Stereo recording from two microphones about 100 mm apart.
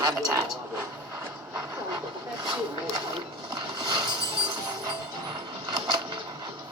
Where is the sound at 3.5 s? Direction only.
45° right (ahead or behind).